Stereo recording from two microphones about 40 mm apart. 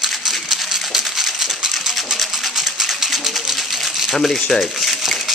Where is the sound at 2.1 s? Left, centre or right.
Centre.